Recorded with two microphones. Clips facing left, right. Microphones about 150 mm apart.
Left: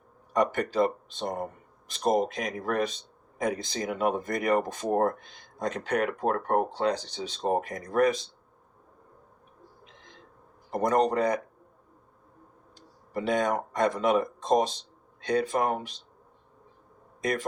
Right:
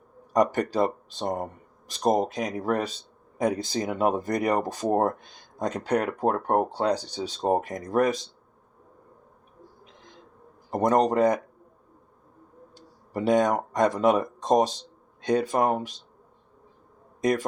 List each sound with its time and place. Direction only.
0.3 s speech: 40° right (ahead or behind)
10.7 s speech: 45° right (ahead or behind)
13.1 s speech: 40° right (ahead or behind)
17.2 s speech: 40° right (ahead or behind)